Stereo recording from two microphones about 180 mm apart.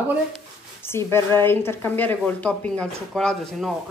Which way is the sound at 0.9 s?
15° left (ahead or behind).